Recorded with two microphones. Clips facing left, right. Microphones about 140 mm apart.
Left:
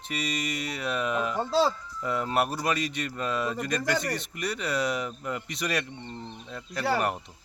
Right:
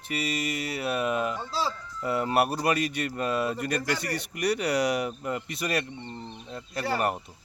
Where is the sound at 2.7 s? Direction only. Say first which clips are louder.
Right 2 dB; 60° right (ahead or behind).